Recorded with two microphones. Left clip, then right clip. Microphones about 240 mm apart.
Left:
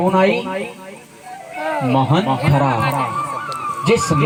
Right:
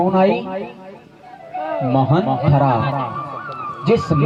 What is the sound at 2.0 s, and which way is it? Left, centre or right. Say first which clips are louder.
Speech: right 1 dB; left.